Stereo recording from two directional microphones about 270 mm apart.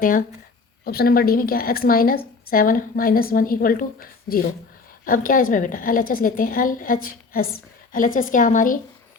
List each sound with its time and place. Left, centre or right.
0.0 s a woman's voice: left